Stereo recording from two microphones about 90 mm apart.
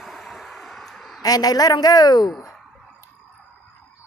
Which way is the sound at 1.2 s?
45° left (ahead or behind).